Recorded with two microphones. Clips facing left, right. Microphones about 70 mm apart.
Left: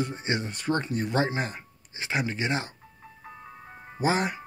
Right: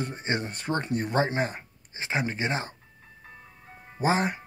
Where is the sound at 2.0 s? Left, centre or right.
Right.